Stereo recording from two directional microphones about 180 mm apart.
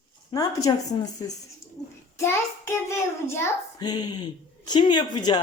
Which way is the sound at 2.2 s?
15° left (ahead or behind).